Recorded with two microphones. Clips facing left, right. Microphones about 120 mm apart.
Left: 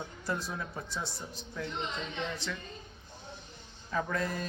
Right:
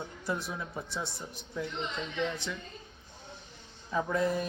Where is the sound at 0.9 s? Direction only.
20° right (ahead or behind).